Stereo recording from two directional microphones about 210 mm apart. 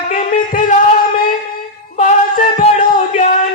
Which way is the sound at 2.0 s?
35° left (ahead or behind).